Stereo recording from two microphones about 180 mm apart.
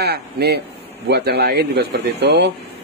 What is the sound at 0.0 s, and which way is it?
Speech, 65° right (ahead or behind).